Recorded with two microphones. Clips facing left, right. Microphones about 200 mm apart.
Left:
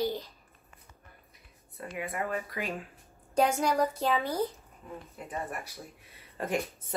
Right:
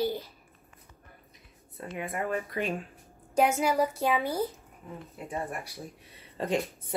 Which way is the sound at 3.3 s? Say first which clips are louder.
Right 1 dB; 5° right (ahead or behind).